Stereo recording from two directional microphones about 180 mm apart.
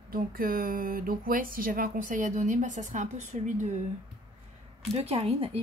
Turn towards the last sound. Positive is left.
turn(degrees=-35)  # may be behind; listen again after turning